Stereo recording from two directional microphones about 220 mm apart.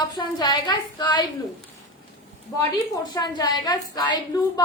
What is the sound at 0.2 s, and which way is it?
A woman's voice, 20° left (ahead or behind).